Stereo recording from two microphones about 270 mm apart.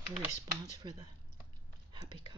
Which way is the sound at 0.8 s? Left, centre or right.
Centre.